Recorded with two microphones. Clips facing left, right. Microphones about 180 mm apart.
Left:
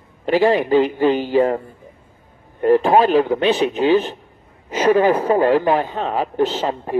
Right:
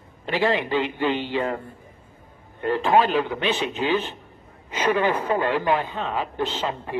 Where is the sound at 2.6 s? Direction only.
40° left (ahead or behind).